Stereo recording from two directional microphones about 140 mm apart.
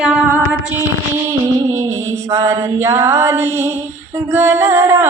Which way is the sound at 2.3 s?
20° right (ahead or behind).